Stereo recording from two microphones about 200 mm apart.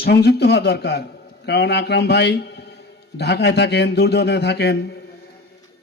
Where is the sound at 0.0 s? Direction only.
55° left (ahead or behind).